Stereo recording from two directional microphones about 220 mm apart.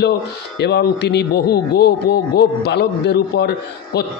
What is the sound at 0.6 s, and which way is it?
Speech, 50° left (ahead or behind).